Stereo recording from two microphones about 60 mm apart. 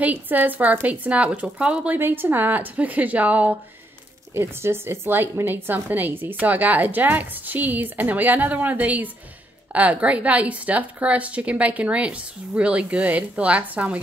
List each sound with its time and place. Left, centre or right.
0.0 s a woman's voice: right
2.0 s a woman's voice: right
4.3 s a woman's voice: right